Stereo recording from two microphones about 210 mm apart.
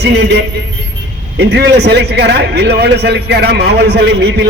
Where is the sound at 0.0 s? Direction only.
55° right (ahead or behind).